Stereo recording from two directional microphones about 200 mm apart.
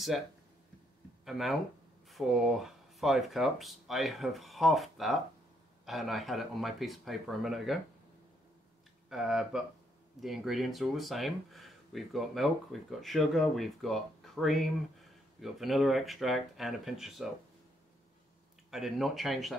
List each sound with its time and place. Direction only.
1.2 s speech: centre (ahead or behind)
9.1 s speech: centre (ahead or behind)
18.7 s speech: centre (ahead or behind)